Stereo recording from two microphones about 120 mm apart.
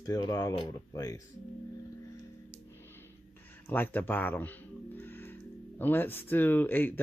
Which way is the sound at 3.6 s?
15° left (ahead or behind).